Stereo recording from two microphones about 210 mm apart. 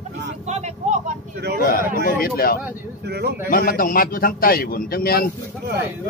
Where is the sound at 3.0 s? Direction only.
50° right (ahead or behind).